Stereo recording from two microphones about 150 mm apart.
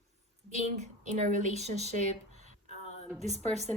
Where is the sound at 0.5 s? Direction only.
50° right (ahead or behind).